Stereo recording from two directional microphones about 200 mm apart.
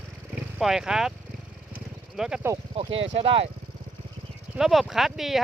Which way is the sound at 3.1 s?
30° right (ahead or behind).